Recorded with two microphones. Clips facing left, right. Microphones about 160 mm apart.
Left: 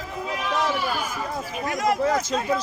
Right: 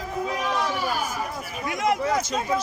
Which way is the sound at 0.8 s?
15° right (ahead or behind).